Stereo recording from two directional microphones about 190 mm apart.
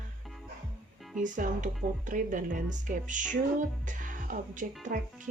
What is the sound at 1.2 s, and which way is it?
Speech, 40° right (ahead or behind).